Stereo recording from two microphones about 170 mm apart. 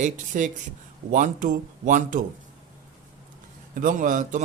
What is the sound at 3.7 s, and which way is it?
Speech, 55° right (ahead or behind).